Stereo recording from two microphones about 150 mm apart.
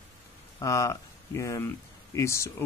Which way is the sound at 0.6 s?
20° left (ahead or behind).